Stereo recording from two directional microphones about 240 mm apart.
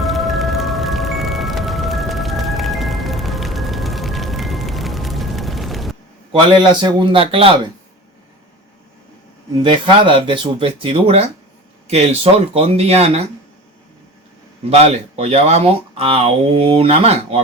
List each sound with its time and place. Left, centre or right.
0.0 s music: centre
6.6 s speech: centre
9.6 s speech: right
14.6 s speech: right